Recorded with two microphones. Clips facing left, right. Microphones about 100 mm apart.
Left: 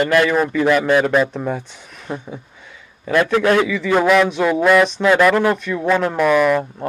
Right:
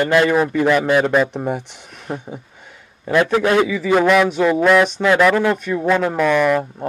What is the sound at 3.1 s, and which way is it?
Speech, 15° right (ahead or behind).